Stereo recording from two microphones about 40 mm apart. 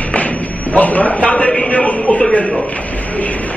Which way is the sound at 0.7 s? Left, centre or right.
Left.